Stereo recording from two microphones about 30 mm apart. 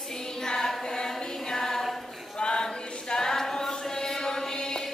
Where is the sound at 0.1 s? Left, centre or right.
Left.